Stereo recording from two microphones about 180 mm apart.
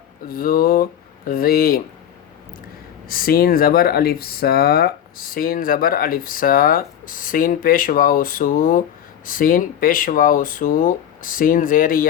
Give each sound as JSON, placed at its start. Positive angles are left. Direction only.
{"t": 0.3, "sound": "speech", "side_deg": 50}
{"t": 3.1, "sound": "speech", "side_deg": 55}